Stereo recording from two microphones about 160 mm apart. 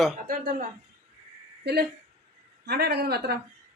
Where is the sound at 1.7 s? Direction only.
90° right.